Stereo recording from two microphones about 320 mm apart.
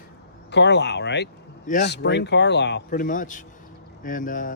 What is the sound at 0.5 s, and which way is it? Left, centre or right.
Speech, left.